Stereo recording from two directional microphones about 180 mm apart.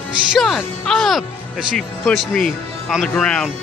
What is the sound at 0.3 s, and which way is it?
Speech, centre (ahead or behind).